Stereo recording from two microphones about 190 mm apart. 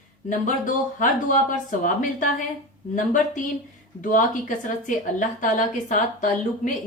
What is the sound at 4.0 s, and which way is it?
Speech, 45° left (ahead or behind).